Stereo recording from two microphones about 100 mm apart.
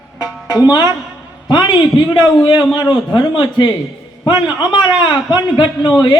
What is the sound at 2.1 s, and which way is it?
A man's voice, 50° left (ahead or behind).